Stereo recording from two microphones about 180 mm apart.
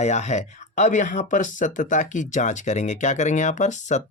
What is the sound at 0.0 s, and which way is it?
Speech, 40° left (ahead or behind).